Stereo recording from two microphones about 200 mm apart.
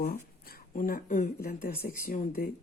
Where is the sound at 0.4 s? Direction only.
45° left (ahead or behind).